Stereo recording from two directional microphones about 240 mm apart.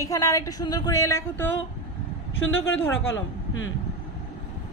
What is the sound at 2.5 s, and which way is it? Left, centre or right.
Speech, left.